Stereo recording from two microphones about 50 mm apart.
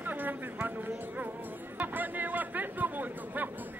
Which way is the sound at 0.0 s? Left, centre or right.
Right.